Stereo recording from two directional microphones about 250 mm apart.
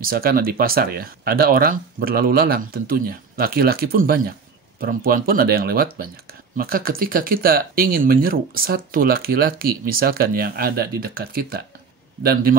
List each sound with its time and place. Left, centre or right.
0.0 s speech: right